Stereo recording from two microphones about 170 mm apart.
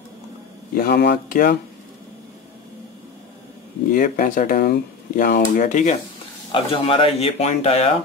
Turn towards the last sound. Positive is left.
turn(degrees=35)  # may be behind; listen again after turning